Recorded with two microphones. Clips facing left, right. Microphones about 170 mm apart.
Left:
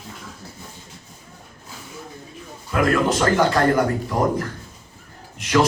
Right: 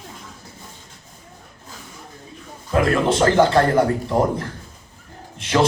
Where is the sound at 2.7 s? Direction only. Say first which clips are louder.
Right 1 dB; 30° right (ahead or behind).